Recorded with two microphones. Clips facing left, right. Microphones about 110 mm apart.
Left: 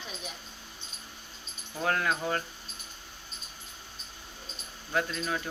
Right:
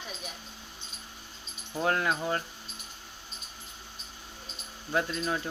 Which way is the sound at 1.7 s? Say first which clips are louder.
Right 1 dB; 20° right (ahead or behind).